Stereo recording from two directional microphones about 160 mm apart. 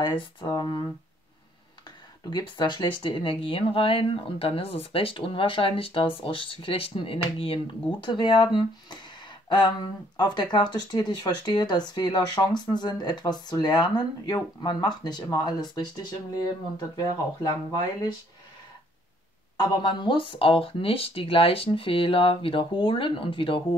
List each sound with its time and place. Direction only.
0.0 s speech: 30° left (ahead or behind)
1.9 s speech: 30° left (ahead or behind)
19.5 s speech: 30° left (ahead or behind)